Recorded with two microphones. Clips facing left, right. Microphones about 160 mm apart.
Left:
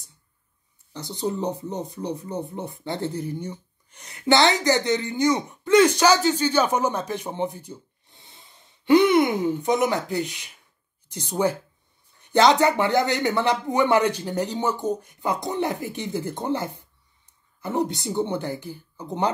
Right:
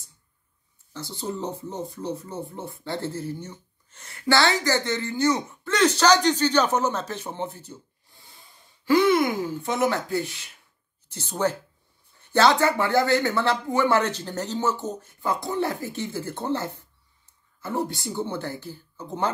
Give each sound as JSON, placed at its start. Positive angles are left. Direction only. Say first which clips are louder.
{"t": 0.9, "sound": "speech", "louder": "left 4 dB", "side_deg": 20}